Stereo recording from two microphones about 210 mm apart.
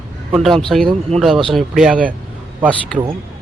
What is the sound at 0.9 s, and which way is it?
Speech, 30° right (ahead or behind).